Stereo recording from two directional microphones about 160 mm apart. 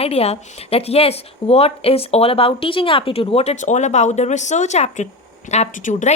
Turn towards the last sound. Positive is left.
turn(degrees=50)  # may be behind; listen again after turning